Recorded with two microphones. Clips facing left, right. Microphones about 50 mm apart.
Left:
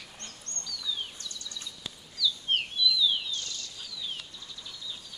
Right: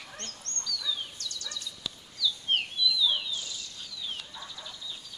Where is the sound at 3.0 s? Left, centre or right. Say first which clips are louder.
Even; centre.